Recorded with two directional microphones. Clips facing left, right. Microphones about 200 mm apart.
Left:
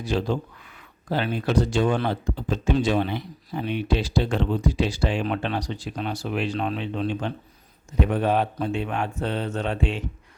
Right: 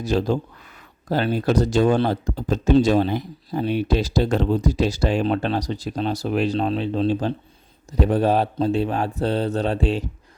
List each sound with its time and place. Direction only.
0.0 s speech: 40° right (ahead or behind)